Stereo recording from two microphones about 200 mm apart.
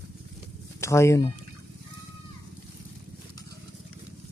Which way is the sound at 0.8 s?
15° left (ahead or behind).